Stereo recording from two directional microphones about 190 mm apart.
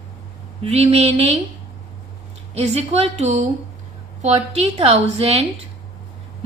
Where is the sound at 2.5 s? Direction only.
35° right (ahead or behind).